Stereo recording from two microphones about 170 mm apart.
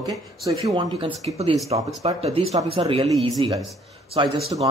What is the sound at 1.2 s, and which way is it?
A man's voice, 35° right (ahead or behind).